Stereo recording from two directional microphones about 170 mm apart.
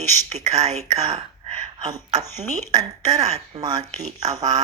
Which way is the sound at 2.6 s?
40° right (ahead or behind).